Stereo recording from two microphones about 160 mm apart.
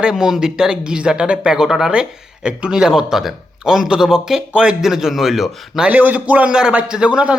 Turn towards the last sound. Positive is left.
turn(degrees=-5)  # may be behind; listen again after turning